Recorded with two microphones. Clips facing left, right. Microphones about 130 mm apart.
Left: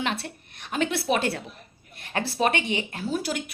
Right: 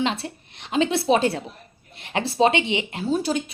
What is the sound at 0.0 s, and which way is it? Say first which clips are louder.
Speech: right 4 dB; 20° right (ahead or behind).